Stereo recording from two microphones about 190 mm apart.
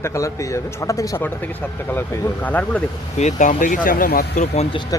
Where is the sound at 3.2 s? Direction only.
40° left (ahead or behind).